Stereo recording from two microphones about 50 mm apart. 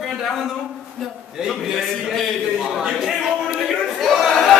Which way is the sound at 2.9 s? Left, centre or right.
Centre.